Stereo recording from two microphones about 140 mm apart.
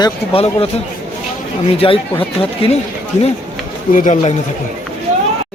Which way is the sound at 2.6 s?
40° left (ahead or behind).